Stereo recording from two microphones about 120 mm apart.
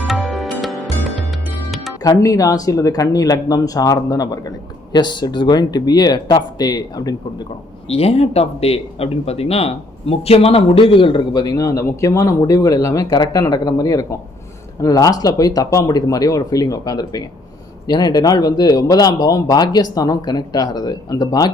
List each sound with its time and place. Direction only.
0.1 s music: centre (ahead or behind)
2.0 s speech: 30° left (ahead or behind)
7.9 s speech: 60° left (ahead or behind); by 21.5 s 35° left (ahead or behind)